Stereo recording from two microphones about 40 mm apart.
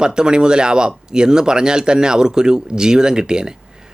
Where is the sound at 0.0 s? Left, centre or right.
Centre.